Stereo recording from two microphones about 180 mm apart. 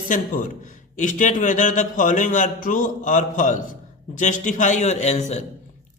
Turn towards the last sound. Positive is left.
turn(degrees=40)  # may be behind; listen again after turning